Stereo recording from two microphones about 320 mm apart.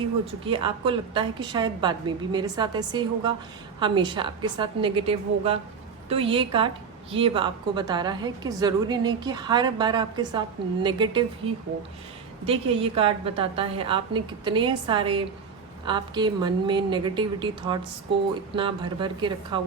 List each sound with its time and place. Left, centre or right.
0.3 s a woman's voice: centre
12.5 s a woman's voice: centre